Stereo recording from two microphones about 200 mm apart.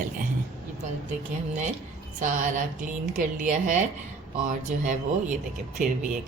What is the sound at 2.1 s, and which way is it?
A woman's voice, 40° right (ahead or behind).